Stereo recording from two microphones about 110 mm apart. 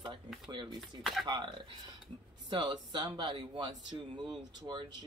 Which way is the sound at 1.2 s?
45° right (ahead or behind).